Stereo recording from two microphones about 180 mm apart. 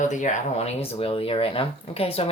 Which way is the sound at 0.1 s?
45° left (ahead or behind).